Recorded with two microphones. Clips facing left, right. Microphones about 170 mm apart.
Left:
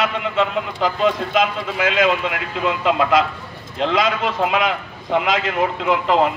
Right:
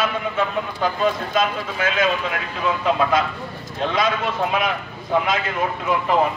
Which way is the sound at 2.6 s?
85° left.